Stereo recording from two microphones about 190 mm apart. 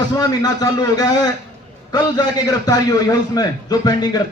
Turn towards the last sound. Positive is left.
turn(degrees=20)  # may be behind; listen again after turning